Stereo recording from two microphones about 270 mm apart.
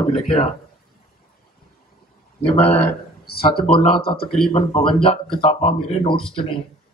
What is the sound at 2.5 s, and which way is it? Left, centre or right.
Speech, left.